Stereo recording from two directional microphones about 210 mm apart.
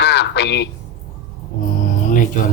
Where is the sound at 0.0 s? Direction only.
55° left (ahead or behind).